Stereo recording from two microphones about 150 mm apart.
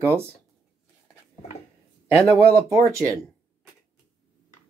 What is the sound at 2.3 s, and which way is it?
Speech, 20° right (ahead or behind).